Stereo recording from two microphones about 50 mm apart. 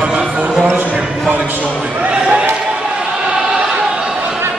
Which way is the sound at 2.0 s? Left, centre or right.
Centre.